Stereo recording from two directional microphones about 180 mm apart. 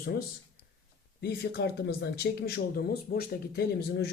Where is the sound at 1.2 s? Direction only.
65° left (ahead or behind).